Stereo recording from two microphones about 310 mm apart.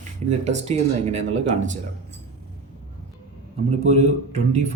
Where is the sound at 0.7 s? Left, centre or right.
Right.